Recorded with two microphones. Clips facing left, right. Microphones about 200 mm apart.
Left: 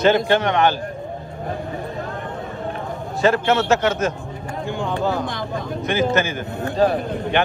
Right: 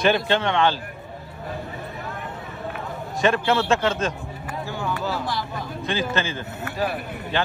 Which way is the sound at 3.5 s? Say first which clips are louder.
Left 3 dB; 20° left (ahead or behind).